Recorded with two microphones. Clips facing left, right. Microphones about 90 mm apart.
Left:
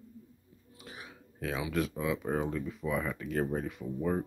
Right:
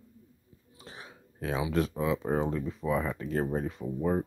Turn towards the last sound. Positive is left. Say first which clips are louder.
# right 3 dB
turn(degrees=-20)  # may be behind; listen again after turning